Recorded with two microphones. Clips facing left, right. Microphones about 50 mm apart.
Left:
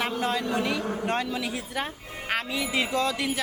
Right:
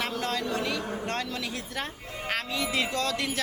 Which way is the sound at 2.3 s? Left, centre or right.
Centre.